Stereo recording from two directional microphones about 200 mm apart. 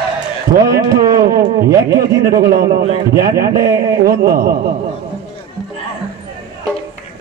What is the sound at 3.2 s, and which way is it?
A man's voice, 50° right (ahead or behind).